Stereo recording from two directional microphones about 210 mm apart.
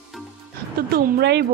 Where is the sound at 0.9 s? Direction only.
50° right (ahead or behind).